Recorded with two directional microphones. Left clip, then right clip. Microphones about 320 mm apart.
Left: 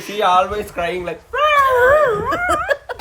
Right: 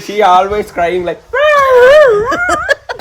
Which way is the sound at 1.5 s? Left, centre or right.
Right.